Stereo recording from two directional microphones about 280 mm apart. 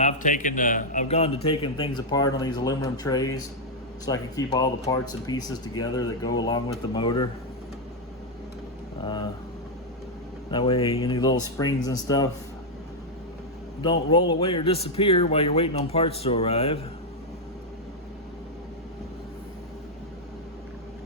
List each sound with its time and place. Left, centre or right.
0.0 s a man's voice: left
9.0 s a man's voice: centre
10.5 s a man's voice: centre
13.8 s speech: centre